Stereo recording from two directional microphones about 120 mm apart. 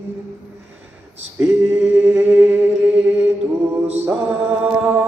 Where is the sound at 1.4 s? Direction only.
20° right (ahead or behind).